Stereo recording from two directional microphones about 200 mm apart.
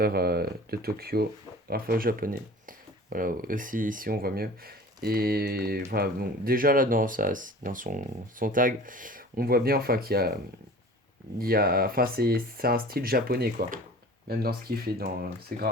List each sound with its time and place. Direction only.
0.0 s speech: 50° right (ahead or behind)
11.3 s speech: 50° right (ahead or behind)